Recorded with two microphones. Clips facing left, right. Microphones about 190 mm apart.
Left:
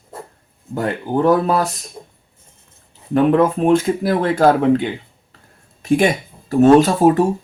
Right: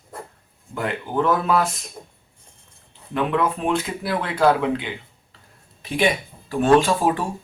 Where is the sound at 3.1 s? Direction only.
40° left (ahead or behind).